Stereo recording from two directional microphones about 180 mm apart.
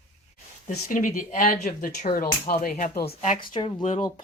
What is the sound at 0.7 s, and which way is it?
Speech, 50° left (ahead or behind).